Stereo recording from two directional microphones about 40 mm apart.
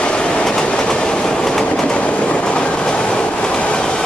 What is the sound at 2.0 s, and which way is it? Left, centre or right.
Train, left.